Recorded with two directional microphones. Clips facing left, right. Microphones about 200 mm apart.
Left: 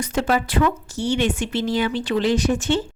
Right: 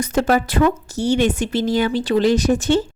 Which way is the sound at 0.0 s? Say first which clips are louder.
Right 4 dB; 40° right (ahead or behind).